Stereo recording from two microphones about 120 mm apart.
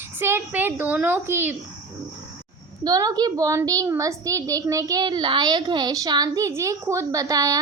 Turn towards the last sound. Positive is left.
turn(degrees=-30)  # may be behind; listen again after turning